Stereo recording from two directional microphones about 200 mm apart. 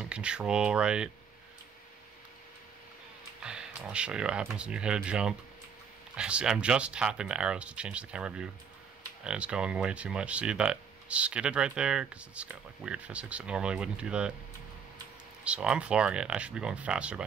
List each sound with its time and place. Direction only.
0.0 s speech: 5° right (ahead or behind)
3.4 s speech: 5° right (ahead or behind)
15.4 s speech: 5° right (ahead or behind)